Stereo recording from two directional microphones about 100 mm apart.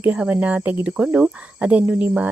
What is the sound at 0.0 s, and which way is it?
Cricket, 15° right (ahead or behind).